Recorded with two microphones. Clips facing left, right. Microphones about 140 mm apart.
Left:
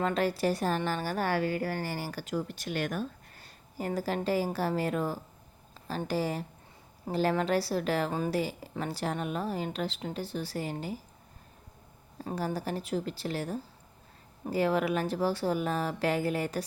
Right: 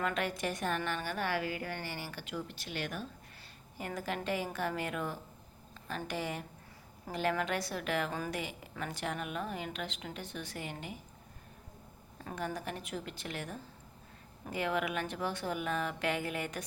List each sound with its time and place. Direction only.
0.0 s a woman's voice: 35° left (ahead or behind)
3.8 s a woman's voice: 35° left (ahead or behind)
12.2 s a woman's voice: 30° left (ahead or behind)